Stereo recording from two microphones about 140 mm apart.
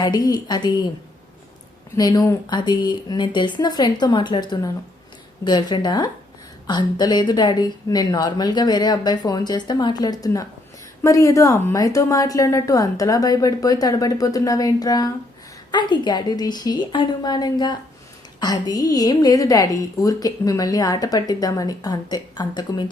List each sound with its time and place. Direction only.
0.0 s a woman's voice: 30° left (ahead or behind)
2.0 s a woman's voice: 25° left (ahead or behind)